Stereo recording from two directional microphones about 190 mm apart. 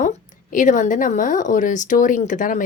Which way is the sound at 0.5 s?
40° left (ahead or behind).